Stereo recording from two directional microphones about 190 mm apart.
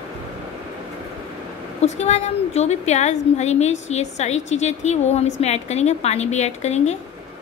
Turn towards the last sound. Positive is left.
turn(degrees=35)  # may be behind; listen again after turning